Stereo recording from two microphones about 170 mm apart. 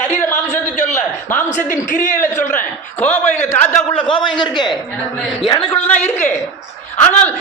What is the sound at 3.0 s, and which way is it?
Speech, 10° left (ahead or behind).